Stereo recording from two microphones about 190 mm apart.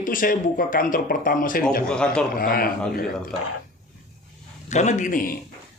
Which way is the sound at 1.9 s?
5° left (ahead or behind).